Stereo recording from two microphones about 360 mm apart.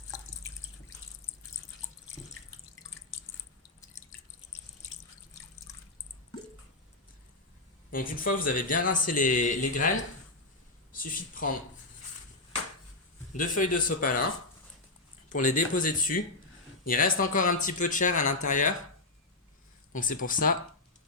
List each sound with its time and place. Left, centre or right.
7.9 s speech: left
10.9 s speech: left
13.3 s speech: left
15.3 s speech: left
19.9 s speech: left